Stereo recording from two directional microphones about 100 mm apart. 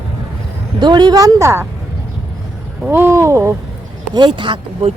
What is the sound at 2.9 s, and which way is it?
Speech, 25° right (ahead or behind).